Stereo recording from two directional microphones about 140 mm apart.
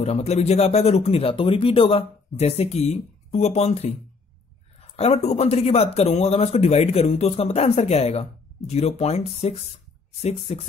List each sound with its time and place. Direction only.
0.0 s speech: 50° left (ahead or behind)
4.9 s speech: 45° left (ahead or behind)